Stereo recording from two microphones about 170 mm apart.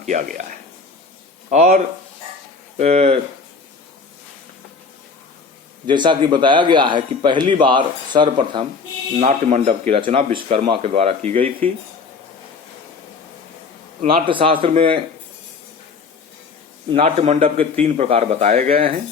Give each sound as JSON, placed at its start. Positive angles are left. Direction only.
{"t": 0.0, "sound": "speech", "side_deg": -50}
{"t": 1.5, "sound": "speech", "side_deg": -45}
{"t": 5.8, "sound": "a man's voice", "side_deg": -25}
{"t": 9.2, "sound": "speech", "side_deg": -45}
{"t": 14.0, "sound": "speech", "side_deg": -30}
{"t": 16.9, "sound": "speech", "side_deg": -40}